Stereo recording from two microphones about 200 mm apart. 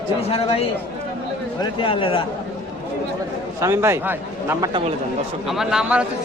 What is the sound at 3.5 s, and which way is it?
A man's voice, 15° right (ahead or behind).